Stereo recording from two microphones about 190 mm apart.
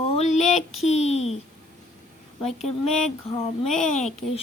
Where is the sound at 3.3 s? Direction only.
30° left (ahead or behind).